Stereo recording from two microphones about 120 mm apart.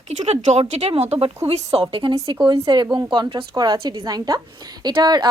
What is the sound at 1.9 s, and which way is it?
A woman's voice, 45° right (ahead or behind).